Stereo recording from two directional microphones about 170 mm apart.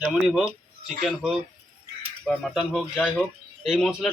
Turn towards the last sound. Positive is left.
turn(degrees=0)  # may be behind; listen again after turning